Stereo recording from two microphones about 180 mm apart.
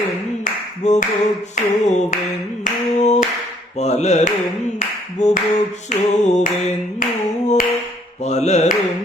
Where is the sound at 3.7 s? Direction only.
40° left (ahead or behind).